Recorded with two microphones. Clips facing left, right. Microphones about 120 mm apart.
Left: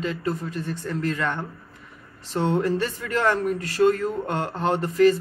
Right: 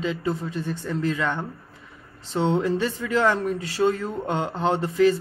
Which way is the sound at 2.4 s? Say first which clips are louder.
Right 1 dB; 20° right (ahead or behind).